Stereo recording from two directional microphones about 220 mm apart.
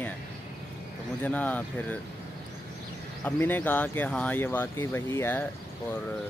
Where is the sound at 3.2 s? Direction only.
10° left (ahead or behind).